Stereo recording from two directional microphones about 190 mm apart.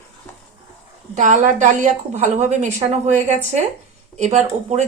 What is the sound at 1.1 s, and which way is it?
Speech, 40° right (ahead or behind).